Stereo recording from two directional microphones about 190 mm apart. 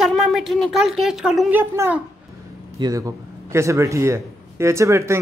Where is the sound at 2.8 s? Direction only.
25° right (ahead or behind).